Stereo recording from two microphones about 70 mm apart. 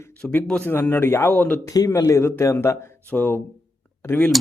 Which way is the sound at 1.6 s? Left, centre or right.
Left.